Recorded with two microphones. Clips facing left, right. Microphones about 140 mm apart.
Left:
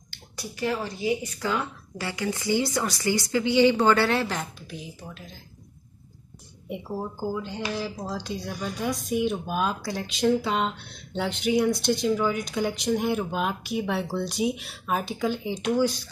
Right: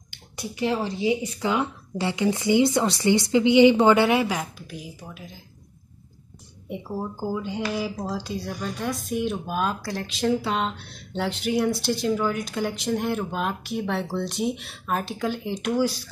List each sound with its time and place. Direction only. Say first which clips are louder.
0.4 s speech: right 3 dB; 20° right (ahead or behind)
7.2 s speech: right 2 dB; 10° right (ahead or behind)